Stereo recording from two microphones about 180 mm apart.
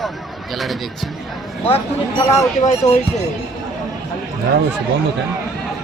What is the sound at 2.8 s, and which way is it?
Speech, 20° left (ahead or behind).